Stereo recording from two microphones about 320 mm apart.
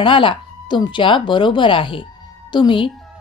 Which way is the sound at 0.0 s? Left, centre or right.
Centre.